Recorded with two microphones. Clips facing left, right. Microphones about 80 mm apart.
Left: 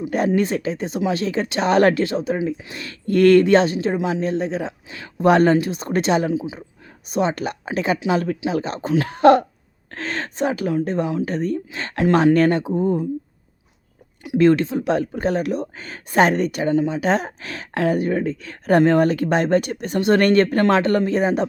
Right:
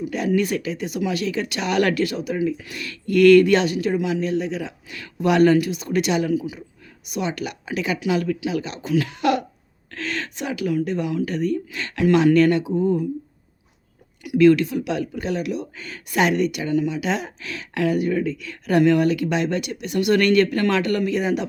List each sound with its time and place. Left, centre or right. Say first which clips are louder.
0.3 s speech: left 1 dB; left
14.3 s speech: right 1 dB; left